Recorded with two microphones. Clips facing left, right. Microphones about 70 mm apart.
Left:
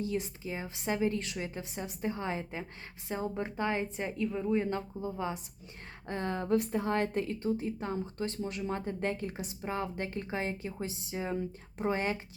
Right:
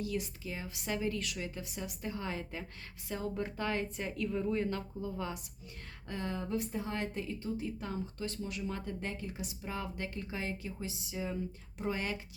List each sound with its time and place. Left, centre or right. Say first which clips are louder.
0.0 s a woman's voice: left 3 dB; left
6.1 s a woman's voice: left 6 dB; left